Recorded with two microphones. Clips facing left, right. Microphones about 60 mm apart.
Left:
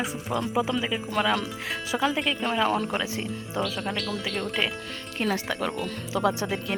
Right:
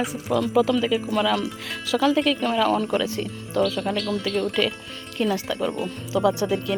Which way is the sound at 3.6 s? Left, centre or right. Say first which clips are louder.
Right 5 dB; centre.